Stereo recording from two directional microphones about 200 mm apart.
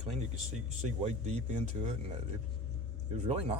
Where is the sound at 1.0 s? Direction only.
35° right (ahead or behind).